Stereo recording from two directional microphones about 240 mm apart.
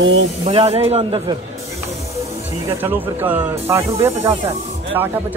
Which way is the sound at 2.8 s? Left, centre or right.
Centre.